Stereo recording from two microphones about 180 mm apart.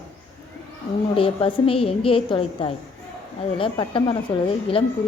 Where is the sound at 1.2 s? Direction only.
30° left (ahead or behind).